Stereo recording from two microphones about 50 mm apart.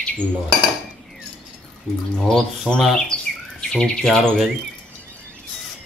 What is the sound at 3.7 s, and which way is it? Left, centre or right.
Speech, centre.